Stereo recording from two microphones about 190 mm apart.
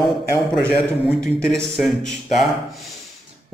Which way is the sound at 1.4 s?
Centre (ahead or behind).